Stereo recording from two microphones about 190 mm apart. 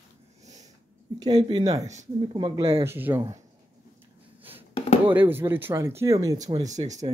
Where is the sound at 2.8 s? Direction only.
10° right (ahead or behind).